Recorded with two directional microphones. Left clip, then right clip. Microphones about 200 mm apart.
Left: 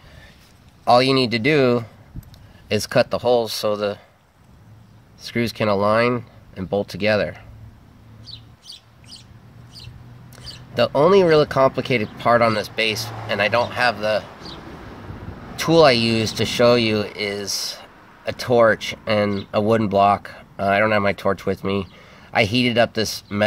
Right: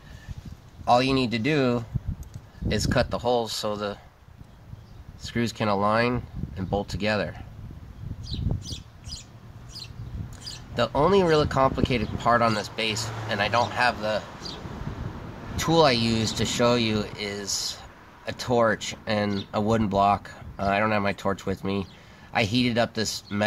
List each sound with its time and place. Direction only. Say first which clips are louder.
0.8 s speech: left 6 dB; 25° left (ahead or behind)
5.2 s speech: left 6 dB; 20° left (ahead or behind)
8.3 s a sound: right 2 dB; 5° right (ahead or behind)
10.7 s speech: left 6 dB; 20° left (ahead or behind)
15.6 s speech: left 6 dB; 25° left (ahead or behind)